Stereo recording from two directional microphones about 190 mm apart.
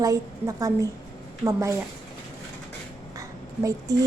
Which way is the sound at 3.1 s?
15° right (ahead or behind).